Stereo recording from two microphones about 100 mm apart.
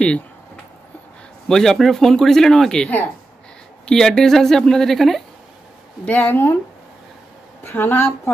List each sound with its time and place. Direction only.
1.5 s speech: 5° left (ahead or behind)
6.0 s a woman's voice: 20° left (ahead or behind)
7.6 s a woman's voice: 20° left (ahead or behind)